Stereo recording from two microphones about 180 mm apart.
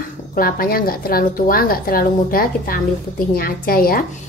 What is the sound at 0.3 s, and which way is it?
A woman's voice, 55° left (ahead or behind).